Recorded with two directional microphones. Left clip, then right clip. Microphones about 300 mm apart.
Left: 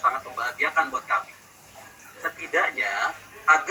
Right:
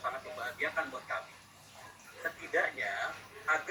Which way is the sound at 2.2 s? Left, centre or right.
Left.